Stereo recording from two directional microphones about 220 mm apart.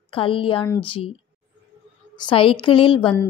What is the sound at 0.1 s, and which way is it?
Speech, 25° left (ahead or behind).